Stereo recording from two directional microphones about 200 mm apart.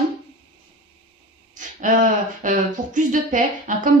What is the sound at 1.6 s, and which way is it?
A woman's voice, 40° right (ahead or behind).